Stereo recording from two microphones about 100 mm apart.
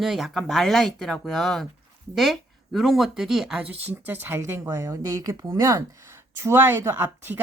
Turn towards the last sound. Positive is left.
turn(degrees=-20)  # may be behind; listen again after turning